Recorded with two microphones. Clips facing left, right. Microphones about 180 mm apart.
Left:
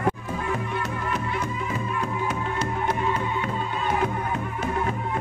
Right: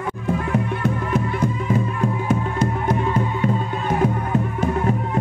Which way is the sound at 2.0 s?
50° right (ahead or behind).